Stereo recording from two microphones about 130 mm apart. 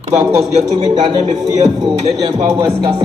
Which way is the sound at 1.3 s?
30° right (ahead or behind).